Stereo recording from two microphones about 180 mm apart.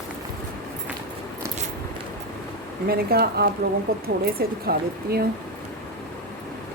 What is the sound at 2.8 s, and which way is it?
Speech, 60° right (ahead or behind).